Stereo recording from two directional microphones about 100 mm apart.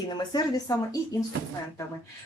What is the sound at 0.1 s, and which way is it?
Speech, 45° left (ahead or behind).